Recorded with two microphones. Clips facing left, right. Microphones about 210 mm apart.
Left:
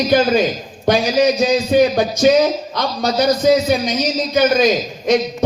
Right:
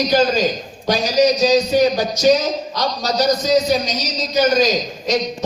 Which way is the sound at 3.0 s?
55° left (ahead or behind).